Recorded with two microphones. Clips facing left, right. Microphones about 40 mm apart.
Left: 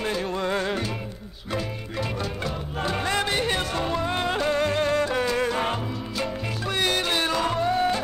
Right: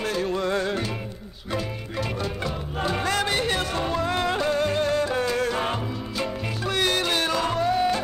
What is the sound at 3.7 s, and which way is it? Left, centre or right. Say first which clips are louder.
Music: even; centre.